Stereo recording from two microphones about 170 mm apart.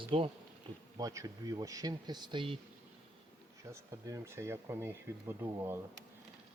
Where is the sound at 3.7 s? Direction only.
15° right (ahead or behind).